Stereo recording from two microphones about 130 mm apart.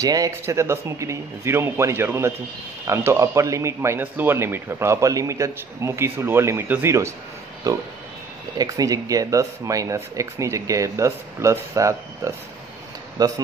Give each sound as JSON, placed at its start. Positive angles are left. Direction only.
{"t": 0.0, "sound": "a man's voice", "side_deg": -25}